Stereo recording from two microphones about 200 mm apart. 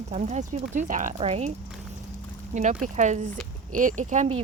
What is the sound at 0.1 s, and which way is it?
Speech, 35° right (ahead or behind).